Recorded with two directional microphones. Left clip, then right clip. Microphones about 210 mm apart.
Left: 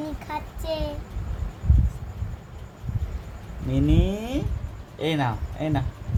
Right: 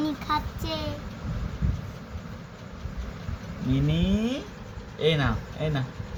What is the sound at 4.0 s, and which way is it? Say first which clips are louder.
Speech: left 1 dB; 45° left (ahead or behind).